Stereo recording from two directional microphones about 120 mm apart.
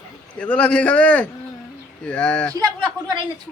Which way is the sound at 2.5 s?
30° right (ahead or behind).